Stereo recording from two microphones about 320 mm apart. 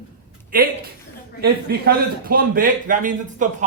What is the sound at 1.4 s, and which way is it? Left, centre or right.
A man's voice, right.